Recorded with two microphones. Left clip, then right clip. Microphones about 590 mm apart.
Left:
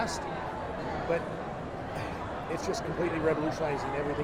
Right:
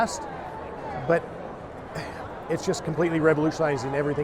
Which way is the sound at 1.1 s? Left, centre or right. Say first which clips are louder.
Right 8 dB; right.